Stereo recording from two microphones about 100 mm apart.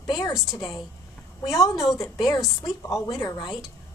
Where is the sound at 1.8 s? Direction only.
Centre (ahead or behind).